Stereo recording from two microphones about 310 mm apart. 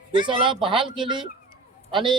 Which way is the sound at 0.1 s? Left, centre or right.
Centre.